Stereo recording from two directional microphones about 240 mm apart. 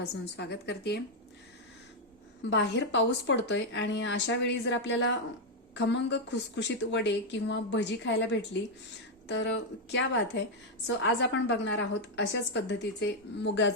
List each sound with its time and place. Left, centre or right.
0.0 s a woman's voice: left
2.4 s a woman's voice: left